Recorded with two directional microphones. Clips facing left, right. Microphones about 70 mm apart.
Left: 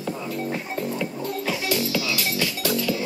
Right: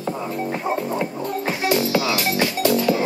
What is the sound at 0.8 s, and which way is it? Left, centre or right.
Music, right.